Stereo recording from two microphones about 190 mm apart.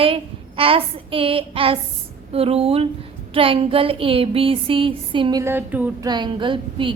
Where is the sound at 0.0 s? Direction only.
30° right (ahead or behind).